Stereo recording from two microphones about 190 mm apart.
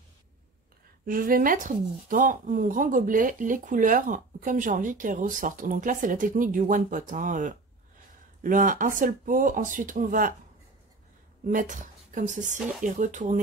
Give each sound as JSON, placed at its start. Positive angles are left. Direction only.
{"t": 1.0, "sound": "speech", "side_deg": -50}
{"t": 11.4, "sound": "speech", "side_deg": -45}